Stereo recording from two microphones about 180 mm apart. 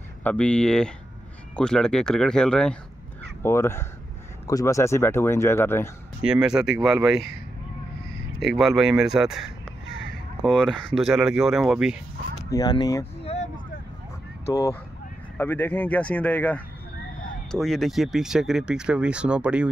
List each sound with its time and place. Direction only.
0.2 s speech: 5° left (ahead or behind)
6.2 s speech: 5° right (ahead or behind)
8.4 s speech: centre (ahead or behind)
12.5 s speech: 20° left (ahead or behind)
13.2 s a sound: 35° left (ahead or behind)
14.5 s speech: 15° left (ahead or behind); by 19.7 s 5° right (ahead or behind)